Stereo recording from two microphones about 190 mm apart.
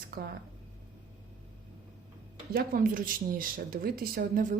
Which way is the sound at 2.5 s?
45° right (ahead or behind).